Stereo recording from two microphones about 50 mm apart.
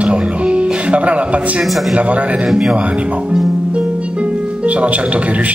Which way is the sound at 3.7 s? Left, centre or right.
Right.